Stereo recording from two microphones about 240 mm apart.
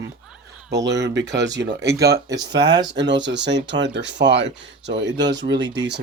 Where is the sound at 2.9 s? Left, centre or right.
Right.